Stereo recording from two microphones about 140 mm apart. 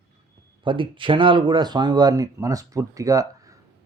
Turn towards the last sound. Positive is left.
turn(degrees=-25)  # may be behind; listen again after turning